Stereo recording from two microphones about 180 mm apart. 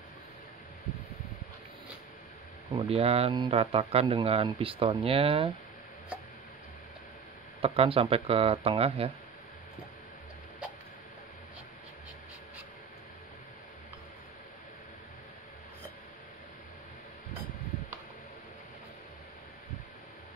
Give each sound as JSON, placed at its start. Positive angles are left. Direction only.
{"t": 2.7, "sound": "speech", "side_deg": -30}
{"t": 7.6, "sound": "speech", "side_deg": -30}